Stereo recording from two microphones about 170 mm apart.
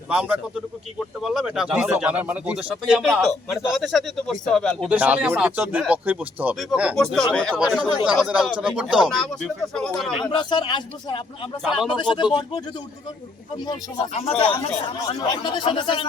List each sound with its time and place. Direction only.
0.1 s speech: 5° right (ahead or behind)
4.9 s speech: 10° right (ahead or behind)
10.2 s a man's voice: 25° left (ahead or behind)
11.6 s speech: centre (ahead or behind)
11.9 s a man's voice: 25° left (ahead or behind)
14.1 s a man's voice: 40° left (ahead or behind)